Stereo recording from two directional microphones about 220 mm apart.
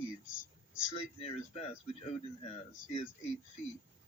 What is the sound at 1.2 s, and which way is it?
Speech, 25° left (ahead or behind).